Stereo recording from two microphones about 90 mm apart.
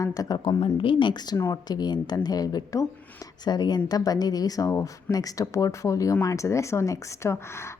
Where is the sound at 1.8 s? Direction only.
50° left (ahead or behind).